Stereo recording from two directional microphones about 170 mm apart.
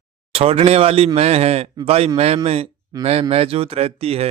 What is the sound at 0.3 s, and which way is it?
Speech, 35° right (ahead or behind).